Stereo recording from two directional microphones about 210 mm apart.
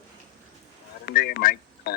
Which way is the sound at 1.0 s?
45° left (ahead or behind).